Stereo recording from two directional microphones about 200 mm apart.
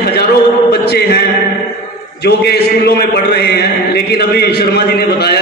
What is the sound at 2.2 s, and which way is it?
A man's voice, 55° left (ahead or behind).